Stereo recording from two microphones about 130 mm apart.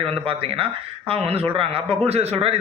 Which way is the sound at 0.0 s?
45° right (ahead or behind).